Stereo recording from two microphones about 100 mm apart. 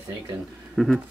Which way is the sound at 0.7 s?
Centre (ahead or behind).